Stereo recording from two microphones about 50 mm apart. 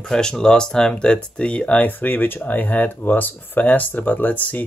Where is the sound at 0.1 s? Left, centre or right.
Centre.